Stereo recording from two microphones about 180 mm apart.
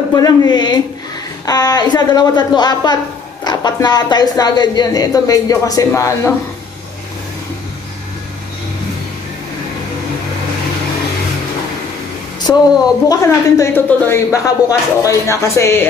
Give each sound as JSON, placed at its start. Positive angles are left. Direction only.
{"t": 0.1, "sound": "speech", "side_deg": 20}
{"t": 12.5, "sound": "speech", "side_deg": 15}